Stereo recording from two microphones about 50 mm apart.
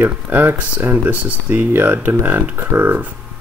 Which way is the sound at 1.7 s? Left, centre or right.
Right.